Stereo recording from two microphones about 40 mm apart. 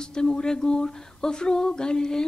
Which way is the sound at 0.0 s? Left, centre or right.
Centre.